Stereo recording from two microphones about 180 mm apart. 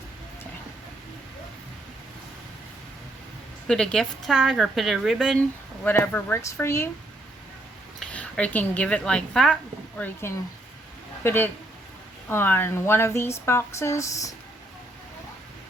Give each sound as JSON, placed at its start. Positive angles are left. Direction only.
{"t": 3.7, "sound": "a woman's voice", "side_deg": 5}
{"t": 5.8, "sound": "speech", "side_deg": 10}
{"t": 7.9, "sound": "speech", "side_deg": 5}
{"t": 10.0, "sound": "speech", "side_deg": 15}